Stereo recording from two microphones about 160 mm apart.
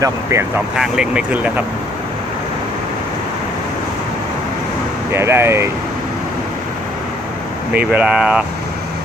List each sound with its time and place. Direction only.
0.0 s speech: 20° right (ahead or behind)
0.8 s speech: 5° right (ahead or behind)
5.1 s speech: 15° right (ahead or behind)
7.7 s speech: 10° right (ahead or behind)